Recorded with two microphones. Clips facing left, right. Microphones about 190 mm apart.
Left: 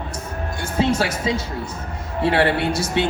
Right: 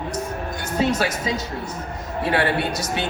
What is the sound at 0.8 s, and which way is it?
A man's voice, 25° left (ahead or behind).